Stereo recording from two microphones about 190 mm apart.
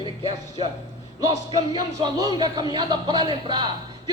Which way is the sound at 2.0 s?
20° right (ahead or behind).